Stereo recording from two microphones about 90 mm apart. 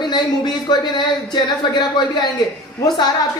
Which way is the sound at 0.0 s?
55° left (ahead or behind).